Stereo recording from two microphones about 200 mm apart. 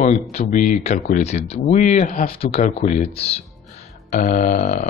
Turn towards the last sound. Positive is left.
turn(degrees=40)  # may be behind; listen again after turning